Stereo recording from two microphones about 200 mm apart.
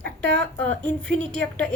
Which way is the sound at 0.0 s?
60° right (ahead or behind).